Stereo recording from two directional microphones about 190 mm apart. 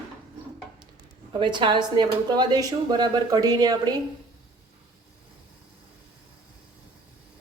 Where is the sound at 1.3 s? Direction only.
25° right (ahead or behind).